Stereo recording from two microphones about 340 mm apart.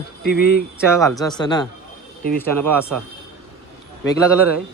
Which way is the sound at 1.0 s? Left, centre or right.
Centre.